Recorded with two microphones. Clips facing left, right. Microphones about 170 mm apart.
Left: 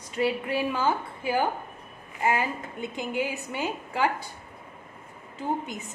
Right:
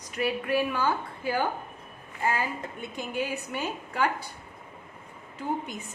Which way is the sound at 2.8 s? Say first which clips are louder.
Left 3 dB; 20° left (ahead or behind).